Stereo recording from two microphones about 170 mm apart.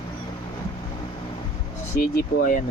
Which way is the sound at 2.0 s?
55° left (ahead or behind).